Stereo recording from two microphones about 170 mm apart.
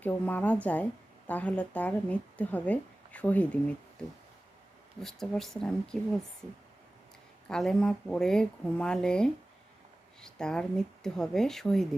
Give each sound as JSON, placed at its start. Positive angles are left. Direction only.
{"t": 0.0, "sound": "speech", "side_deg": 10}
{"t": 4.9, "sound": "speech", "side_deg": 5}
{"t": 7.4, "sound": "speech", "side_deg": 5}